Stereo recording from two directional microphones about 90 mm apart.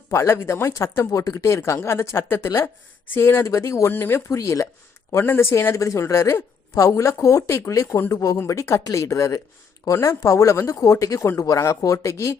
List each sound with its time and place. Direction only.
0.1 s a woman's voice: 30° left (ahead or behind)
1.2 s speech: 45° left (ahead or behind)
1.5 s a woman's voice: 30° left (ahead or behind)